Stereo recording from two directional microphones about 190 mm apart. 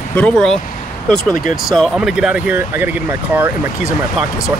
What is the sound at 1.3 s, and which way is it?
Speech, 45° left (ahead or behind).